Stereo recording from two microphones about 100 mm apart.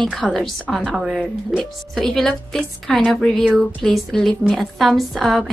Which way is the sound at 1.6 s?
5° left (ahead or behind).